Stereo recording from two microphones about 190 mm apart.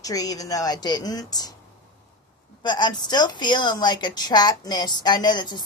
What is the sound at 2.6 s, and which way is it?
A woman's voice, 25° left (ahead or behind).